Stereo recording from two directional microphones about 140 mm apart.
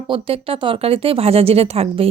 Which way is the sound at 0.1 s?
40° right (ahead or behind).